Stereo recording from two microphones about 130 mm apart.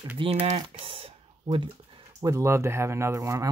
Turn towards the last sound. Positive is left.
turn(degrees=-25)  # may be behind; listen again after turning